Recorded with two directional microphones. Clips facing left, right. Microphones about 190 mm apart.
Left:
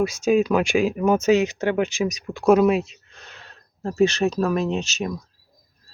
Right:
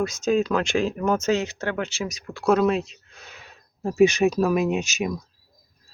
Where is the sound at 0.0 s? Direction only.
10° left (ahead or behind); by 5.1 s 10° right (ahead or behind).